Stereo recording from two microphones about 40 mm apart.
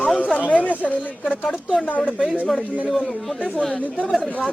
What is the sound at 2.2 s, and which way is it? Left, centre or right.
Speech, right.